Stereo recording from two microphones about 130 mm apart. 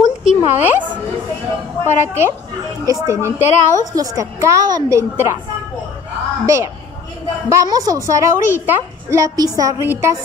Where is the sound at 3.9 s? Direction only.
25° right (ahead or behind).